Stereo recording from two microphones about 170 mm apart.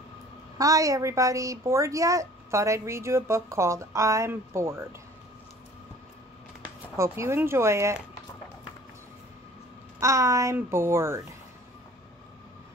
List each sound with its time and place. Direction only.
0.6 s a woman's voice: 20° right (ahead or behind)
7.0 s a woman's voice: 15° right (ahead or behind)
9.9 s a woman's voice: 20° right (ahead or behind)